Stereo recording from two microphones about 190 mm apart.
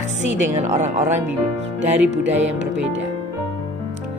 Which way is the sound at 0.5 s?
40° right (ahead or behind).